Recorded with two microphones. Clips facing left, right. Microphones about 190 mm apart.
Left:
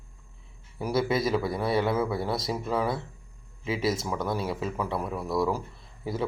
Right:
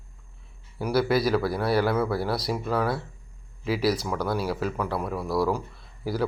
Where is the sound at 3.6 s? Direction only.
25° left (ahead or behind).